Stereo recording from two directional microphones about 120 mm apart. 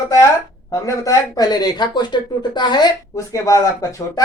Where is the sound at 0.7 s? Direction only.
30° left (ahead or behind).